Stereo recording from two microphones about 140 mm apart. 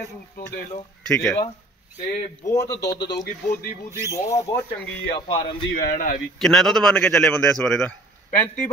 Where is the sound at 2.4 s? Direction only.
25° left (ahead or behind).